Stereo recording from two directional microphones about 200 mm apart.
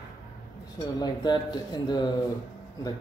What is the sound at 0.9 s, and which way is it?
Speech, 20° left (ahead or behind).